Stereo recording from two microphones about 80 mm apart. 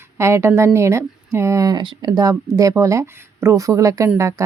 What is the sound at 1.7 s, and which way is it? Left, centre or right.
A woman's voice, right.